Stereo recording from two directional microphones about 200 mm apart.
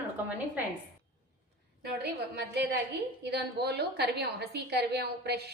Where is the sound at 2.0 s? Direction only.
55° right (ahead or behind).